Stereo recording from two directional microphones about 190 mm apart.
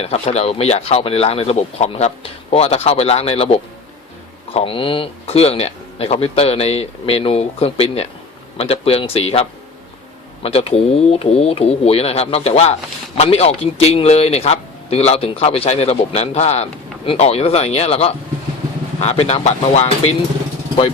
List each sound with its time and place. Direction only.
0.0 s speech: 35° left (ahead or behind)
10.4 s speech: 30° left (ahead or behind)